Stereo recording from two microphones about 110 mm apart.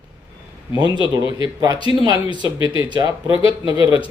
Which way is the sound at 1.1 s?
40° right (ahead or behind).